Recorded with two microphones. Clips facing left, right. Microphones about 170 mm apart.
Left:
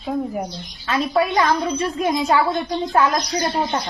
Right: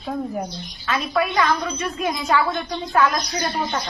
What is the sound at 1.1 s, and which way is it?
Speech, 25° left (ahead or behind).